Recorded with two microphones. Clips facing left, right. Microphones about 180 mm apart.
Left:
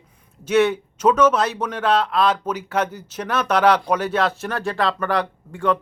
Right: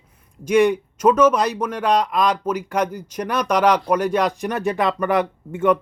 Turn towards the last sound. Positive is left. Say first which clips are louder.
# right 3 dB
turn(degrees=-20)  # may be behind; listen again after turning